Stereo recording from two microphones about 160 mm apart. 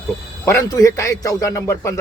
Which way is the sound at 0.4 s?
20° left (ahead or behind).